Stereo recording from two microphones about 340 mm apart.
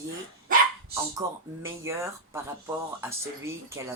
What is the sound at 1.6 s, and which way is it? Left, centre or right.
Speech, centre.